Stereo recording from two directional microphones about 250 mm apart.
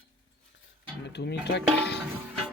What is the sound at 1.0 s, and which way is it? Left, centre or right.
Speech, left.